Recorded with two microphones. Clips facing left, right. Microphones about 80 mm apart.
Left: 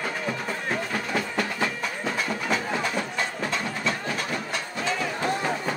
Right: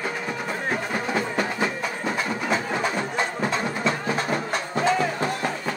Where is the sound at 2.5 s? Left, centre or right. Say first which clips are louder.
Right 2 dB; right.